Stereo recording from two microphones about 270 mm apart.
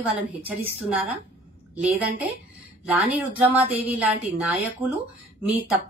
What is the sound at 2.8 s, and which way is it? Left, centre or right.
A woman's voice, centre.